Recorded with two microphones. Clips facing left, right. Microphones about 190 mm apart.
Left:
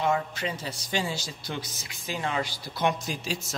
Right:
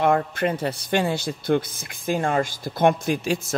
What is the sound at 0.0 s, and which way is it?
Speech, 55° right (ahead or behind).